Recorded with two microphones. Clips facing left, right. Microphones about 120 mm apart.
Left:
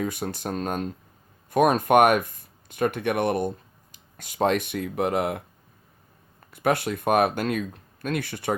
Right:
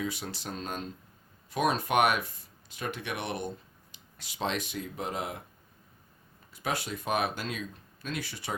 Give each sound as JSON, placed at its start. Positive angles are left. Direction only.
{"t": 0.0, "sound": "speech", "side_deg": 50}
{"t": 6.5, "sound": "speech", "side_deg": 60}